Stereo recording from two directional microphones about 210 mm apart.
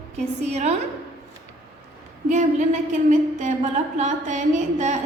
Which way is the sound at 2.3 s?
35° right (ahead or behind).